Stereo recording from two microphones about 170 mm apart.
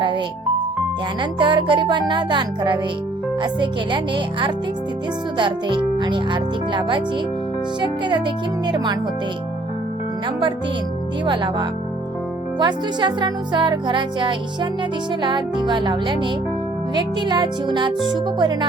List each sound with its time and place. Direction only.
1.2 s speech: 30° right (ahead or behind)
11.3 s speech: 30° right (ahead or behind)